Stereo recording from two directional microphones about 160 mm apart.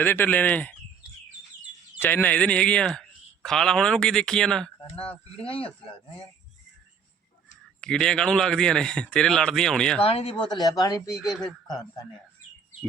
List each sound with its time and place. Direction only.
0.0 s speech: 10° left (ahead or behind)
2.0 s speech: 10° left (ahead or behind)
4.9 s speech: 35° left (ahead or behind)
7.8 s speech: 5° left (ahead or behind)
10.0 s speech: 35° left (ahead or behind); by 11.2 s 20° left (ahead or behind)
11.2 s speech: centre (ahead or behind)
11.7 s speech: 25° left (ahead or behind)